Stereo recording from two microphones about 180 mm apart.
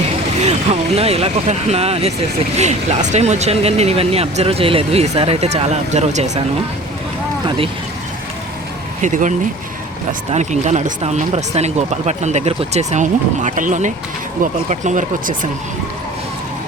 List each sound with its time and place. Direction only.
0.4 s speech: 35° right (ahead or behind)
7.4 s speech: 30° right (ahead or behind)
9.0 s speech: 45° right (ahead or behind)